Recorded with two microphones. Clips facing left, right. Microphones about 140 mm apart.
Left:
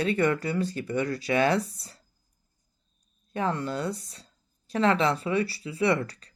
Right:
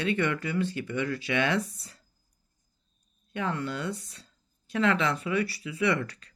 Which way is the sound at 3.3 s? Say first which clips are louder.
Left 3 dB; 35° left (ahead or behind).